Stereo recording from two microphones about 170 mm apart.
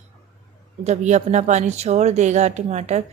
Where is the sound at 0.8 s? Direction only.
45° right (ahead or behind).